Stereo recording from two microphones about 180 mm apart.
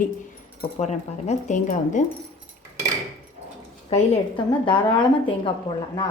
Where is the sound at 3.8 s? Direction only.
35° left (ahead or behind).